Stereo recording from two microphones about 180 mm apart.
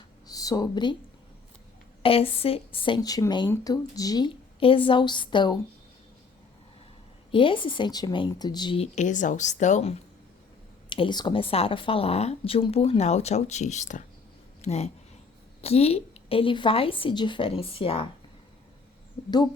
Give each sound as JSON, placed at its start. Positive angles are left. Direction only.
{"t": 0.3, "sound": "speech", "side_deg": 20}
{"t": 2.0, "sound": "speech", "side_deg": 30}
{"t": 7.3, "sound": "speech", "side_deg": 30}